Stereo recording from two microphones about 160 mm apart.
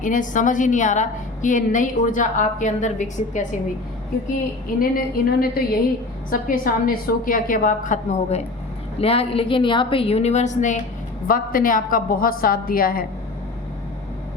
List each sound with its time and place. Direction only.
0.0 s a woman's voice: 55° left (ahead or behind)
4.8 s a woman's voice: 65° left (ahead or behind); by 8.4 s 50° left (ahead or behind)
9.0 s a woman's voice: 40° left (ahead or behind)
11.3 s a woman's voice: 60° left (ahead or behind)